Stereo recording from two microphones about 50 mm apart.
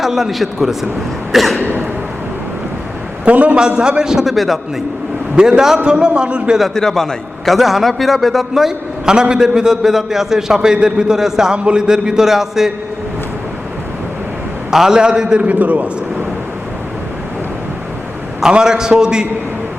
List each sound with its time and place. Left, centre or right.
0.0 s a man's voice: centre
1.3 s a sound: centre
1.6 s a sound: right
3.2 s a man's voice: right
3.6 s a man's voice: centre
5.4 s a man's voice: centre
6.7 s a man's voice: centre
14.7 s a man's voice: centre
15.4 s a man's voice: right
18.4 s a man's voice: centre